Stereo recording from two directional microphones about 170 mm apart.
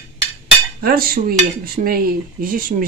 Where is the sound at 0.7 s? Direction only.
60° right (ahead or behind).